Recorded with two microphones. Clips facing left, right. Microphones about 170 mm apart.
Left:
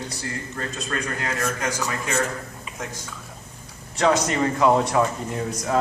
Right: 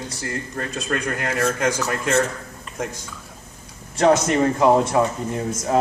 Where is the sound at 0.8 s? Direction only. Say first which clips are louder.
Right 4 dB; 65° right (ahead or behind).